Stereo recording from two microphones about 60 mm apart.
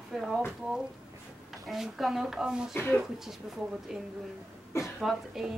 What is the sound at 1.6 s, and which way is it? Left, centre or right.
Speech, centre.